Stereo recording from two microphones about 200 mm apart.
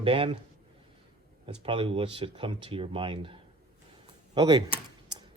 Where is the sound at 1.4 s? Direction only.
25° right (ahead or behind).